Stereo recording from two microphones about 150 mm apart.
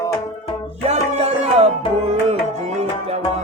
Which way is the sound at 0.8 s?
45° right (ahead or behind).